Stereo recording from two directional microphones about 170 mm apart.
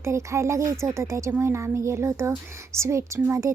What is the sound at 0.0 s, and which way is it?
Speech, 15° right (ahead or behind).